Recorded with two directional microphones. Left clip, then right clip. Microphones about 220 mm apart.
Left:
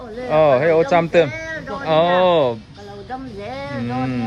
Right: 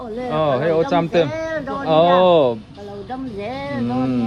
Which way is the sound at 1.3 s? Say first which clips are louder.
Right 4 dB; 40° right (ahead or behind).